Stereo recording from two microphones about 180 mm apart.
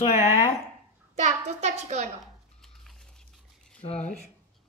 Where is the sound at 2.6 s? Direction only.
Centre (ahead or behind).